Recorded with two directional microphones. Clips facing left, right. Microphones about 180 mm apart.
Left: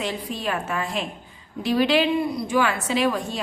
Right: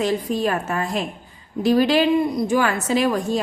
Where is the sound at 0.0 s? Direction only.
45° right (ahead or behind).